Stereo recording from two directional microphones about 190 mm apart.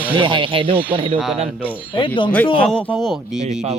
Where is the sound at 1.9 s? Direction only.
25° left (ahead or behind).